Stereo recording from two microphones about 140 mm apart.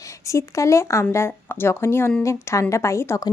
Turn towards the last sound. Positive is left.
turn(degrees=20)  # may be behind; listen again after turning